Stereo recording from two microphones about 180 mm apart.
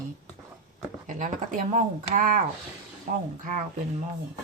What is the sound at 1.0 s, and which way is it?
Speech, 45° right (ahead or behind).